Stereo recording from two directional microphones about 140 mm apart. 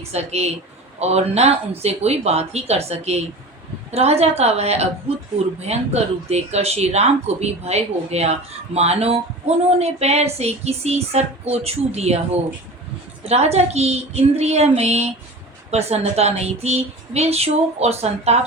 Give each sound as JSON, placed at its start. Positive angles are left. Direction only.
{"t": 0.1, "sound": "speech", "side_deg": -50}